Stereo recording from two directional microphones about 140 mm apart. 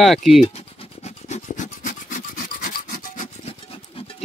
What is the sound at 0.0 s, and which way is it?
Speech, centre (ahead or behind).